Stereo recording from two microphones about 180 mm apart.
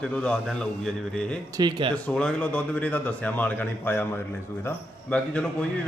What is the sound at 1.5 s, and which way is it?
Speech, 25° right (ahead or behind).